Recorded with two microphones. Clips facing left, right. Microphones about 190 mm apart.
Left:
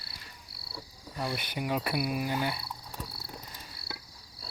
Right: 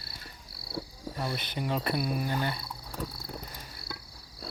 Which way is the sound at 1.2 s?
10° left (ahead or behind).